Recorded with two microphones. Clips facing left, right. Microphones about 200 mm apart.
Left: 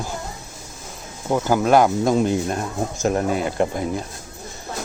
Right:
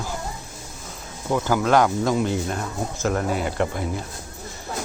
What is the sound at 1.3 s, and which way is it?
Speech, 20° left (ahead or behind).